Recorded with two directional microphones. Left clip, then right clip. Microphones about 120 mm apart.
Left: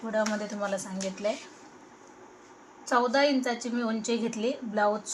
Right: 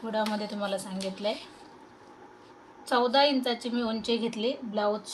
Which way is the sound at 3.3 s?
20° left (ahead or behind).